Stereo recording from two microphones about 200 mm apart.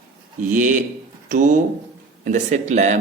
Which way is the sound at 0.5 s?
40° right (ahead or behind).